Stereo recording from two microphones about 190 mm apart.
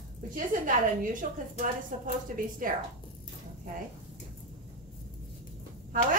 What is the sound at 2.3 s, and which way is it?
Speech, 45° right (ahead or behind).